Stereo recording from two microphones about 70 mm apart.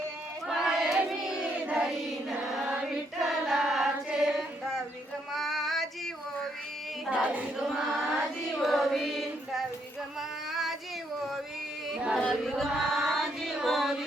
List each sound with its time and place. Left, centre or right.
0.4 s crowd: centre
1.6 s child singing: centre
2.4 s music: centre
3.2 s choir: centre
5.3 s female singing: centre
7.1 s choir: centre
7.5 s choir: centre
10.2 s female singing: centre
11.9 s a sound: centre
12.3 s music: centre